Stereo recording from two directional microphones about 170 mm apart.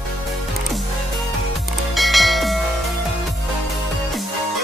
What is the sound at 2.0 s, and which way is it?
Music, centre (ahead or behind).